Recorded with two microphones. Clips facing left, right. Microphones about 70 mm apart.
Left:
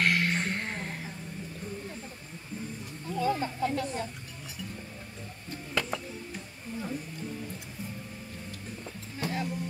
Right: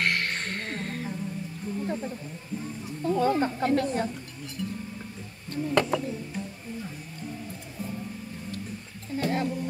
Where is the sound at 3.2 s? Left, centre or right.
Right.